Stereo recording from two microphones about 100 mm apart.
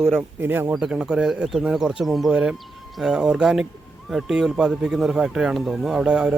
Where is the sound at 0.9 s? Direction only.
5° right (ahead or behind).